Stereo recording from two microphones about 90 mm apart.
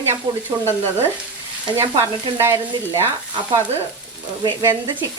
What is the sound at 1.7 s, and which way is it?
Frying, 40° right (ahead or behind).